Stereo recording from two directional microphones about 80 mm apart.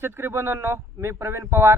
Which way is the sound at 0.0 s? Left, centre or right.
Right.